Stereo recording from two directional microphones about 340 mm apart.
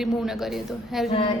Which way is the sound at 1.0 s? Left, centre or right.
Centre.